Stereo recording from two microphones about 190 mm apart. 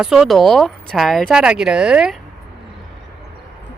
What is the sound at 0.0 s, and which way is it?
Speech, centre (ahead or behind).